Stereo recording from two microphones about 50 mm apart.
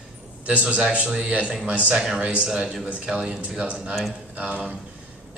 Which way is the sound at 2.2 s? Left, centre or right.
Right.